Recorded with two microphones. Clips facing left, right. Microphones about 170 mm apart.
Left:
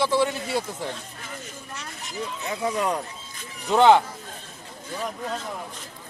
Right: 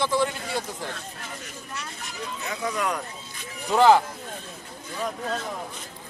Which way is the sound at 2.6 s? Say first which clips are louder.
Left 3 dB; 30° left (ahead or behind).